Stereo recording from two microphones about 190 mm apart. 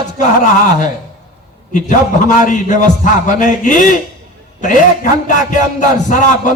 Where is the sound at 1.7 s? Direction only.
40° left (ahead or behind).